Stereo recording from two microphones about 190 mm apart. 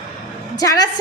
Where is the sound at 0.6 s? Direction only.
20° left (ahead or behind).